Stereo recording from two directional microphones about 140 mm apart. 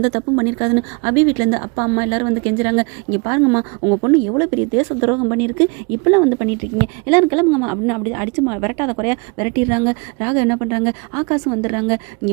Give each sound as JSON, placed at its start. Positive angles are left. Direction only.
{"t": 0.0, "sound": "a woman's voice", "side_deg": -30}